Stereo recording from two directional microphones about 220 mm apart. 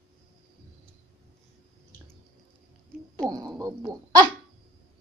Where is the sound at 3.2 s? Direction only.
15° right (ahead or behind).